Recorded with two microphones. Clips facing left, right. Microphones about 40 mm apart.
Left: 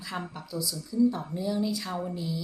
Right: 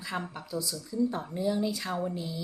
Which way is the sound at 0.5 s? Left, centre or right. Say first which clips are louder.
Left 2 dB; right.